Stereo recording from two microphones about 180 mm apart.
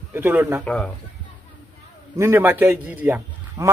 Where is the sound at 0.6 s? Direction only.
5° left (ahead or behind).